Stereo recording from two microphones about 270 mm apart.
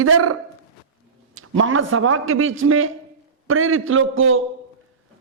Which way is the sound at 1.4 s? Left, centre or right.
Right.